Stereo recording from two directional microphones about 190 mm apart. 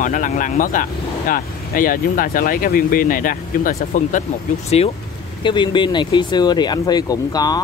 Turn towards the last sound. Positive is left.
turn(degrees=20)  # may be behind; listen again after turning